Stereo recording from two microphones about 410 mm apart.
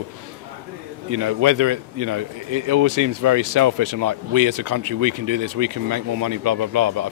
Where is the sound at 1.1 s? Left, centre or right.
Right.